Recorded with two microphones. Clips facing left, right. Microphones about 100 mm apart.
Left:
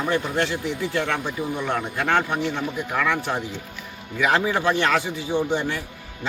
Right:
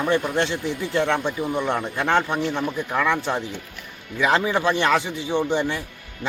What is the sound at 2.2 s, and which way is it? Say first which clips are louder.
Speech: right 2 dB; 5° left (ahead or behind).